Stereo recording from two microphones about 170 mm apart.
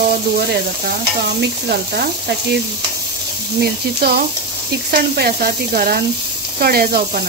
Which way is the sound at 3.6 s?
70° right (ahead or behind).